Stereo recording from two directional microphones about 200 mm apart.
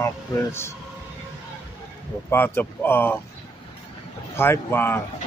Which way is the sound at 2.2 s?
10° left (ahead or behind).